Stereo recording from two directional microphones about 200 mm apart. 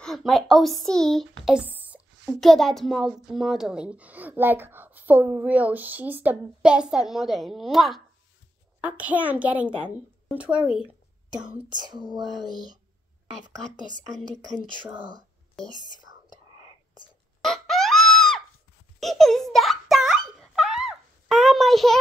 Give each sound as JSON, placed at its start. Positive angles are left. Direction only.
{"t": 0.0, "sound": "a woman's voice", "side_deg": 0}
{"t": 11.7, "sound": "a sound", "side_deg": -20}
{"t": 13.7, "sound": "a woman's voice", "side_deg": -40}
{"t": 17.4, "sound": "music", "side_deg": 0}
{"t": 18.9, "sound": "giggle", "side_deg": 0}